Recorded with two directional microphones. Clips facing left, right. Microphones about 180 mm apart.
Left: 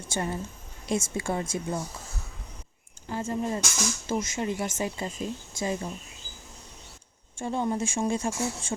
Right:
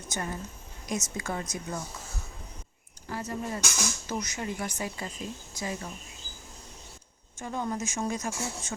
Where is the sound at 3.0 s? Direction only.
20° left (ahead or behind).